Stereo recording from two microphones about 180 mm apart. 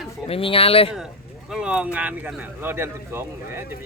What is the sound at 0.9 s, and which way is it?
Speech, 5° right (ahead or behind).